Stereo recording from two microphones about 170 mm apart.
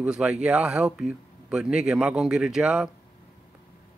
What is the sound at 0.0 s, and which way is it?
Speech, 5° right (ahead or behind).